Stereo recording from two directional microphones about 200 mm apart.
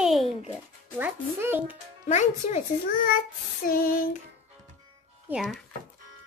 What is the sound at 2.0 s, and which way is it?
Speech, 35° left (ahead or behind).